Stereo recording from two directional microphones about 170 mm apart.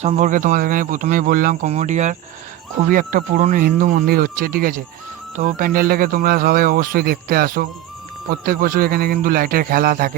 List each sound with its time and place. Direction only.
0.0 s speech: 45° right (ahead or behind)